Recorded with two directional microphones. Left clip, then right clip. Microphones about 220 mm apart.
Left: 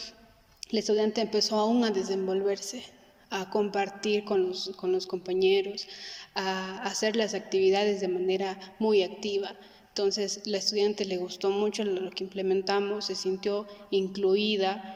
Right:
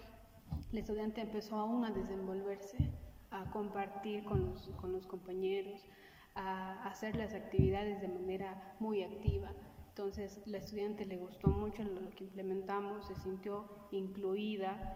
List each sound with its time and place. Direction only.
0.7 s a woman's voice: 35° left (ahead or behind)